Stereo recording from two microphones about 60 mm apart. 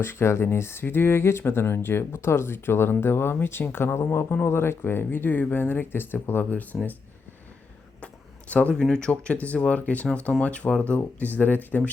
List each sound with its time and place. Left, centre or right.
0.0 s speech: left
8.0 s a sound: left
8.7 s speech: centre; by 11.8 s left